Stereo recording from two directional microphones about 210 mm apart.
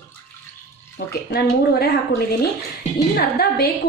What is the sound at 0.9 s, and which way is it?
A woman's voice, 50° left (ahead or behind).